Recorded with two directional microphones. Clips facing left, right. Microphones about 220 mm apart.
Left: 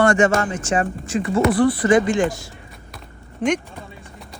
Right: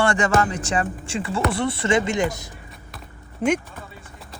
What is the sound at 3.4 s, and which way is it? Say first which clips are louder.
Speech: left 1 dB; 5° right (ahead or behind).